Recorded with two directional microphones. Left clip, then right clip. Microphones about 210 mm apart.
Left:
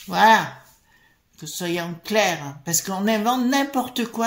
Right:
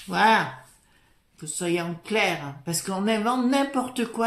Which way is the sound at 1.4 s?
35° left (ahead or behind).